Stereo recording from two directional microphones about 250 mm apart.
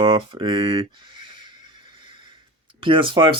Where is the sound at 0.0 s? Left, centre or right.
Centre.